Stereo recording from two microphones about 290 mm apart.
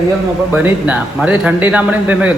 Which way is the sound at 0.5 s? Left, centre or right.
Centre.